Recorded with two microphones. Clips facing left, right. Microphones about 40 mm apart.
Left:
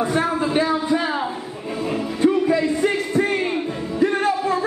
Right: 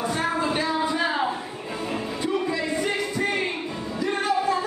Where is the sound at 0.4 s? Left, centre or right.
Centre.